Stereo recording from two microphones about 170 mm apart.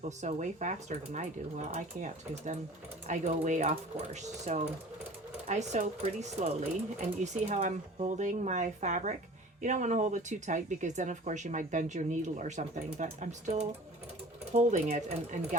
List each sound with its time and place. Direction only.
0.2 s speech: 45° right (ahead or behind)